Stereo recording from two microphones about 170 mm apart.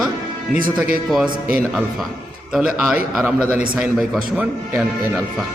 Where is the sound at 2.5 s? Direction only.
5° right (ahead or behind).